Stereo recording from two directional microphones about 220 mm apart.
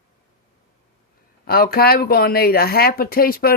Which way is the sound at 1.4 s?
45° left (ahead or behind).